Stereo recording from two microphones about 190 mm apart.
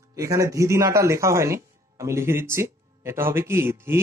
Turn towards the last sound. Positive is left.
turn(degrees=-15)  # may be behind; listen again after turning